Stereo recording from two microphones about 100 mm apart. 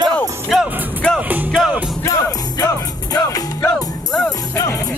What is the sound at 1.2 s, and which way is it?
Music, 20° right (ahead or behind).